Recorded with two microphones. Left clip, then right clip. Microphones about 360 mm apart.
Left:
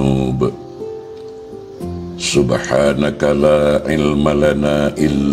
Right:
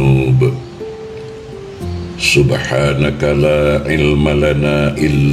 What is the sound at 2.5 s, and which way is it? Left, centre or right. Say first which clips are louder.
Mantra: left 1 dB; left.